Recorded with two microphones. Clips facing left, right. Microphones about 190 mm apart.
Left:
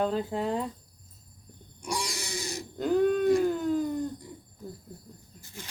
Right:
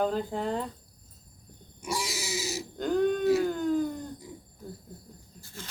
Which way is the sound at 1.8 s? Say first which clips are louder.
Right 1 dB; 5° right (ahead or behind).